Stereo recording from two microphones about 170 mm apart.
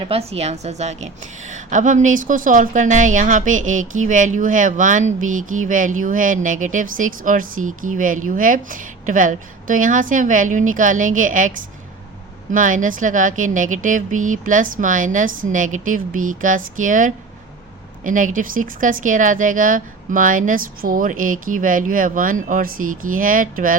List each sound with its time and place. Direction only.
0.0 s a woman's voice: 35° right (ahead or behind); by 23.7 s 55° right (ahead or behind)